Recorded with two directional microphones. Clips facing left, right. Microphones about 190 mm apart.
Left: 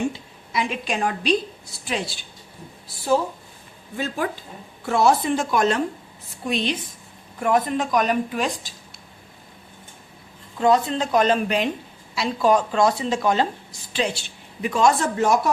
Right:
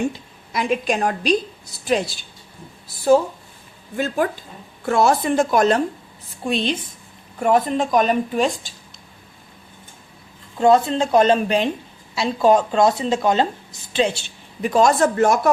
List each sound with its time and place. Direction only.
0.5 s speech: 45° right (ahead or behind)
3.9 s speech: 50° right (ahead or behind)
6.4 s speech: 30° right (ahead or behind)
10.6 s a woman's voice: 30° right (ahead or behind)
14.6 s speech: 40° right (ahead or behind)